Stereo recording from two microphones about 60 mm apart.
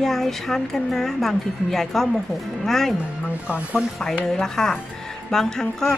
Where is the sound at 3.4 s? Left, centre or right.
Right.